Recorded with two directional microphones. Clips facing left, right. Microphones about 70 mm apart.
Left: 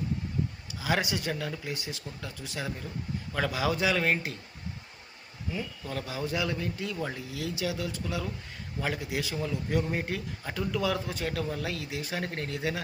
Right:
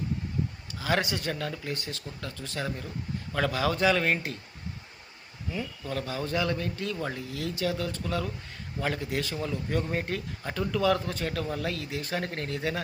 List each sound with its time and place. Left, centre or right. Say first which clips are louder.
0.7 s speech: right 1 dB; centre
5.5 s speech: right 3 dB; centre